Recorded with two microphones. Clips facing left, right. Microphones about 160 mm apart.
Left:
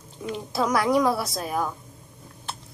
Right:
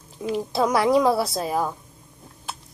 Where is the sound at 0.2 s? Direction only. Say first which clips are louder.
Right 5 dB; 20° right (ahead or behind).